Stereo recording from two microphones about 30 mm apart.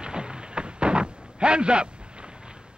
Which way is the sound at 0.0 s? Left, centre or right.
Right.